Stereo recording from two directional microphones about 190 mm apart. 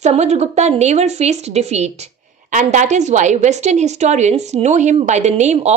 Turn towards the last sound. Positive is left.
turn(degrees=-35)  # may be behind; listen again after turning